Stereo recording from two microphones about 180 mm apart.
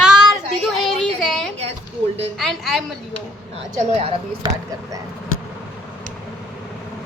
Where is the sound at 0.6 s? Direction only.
Centre (ahead or behind).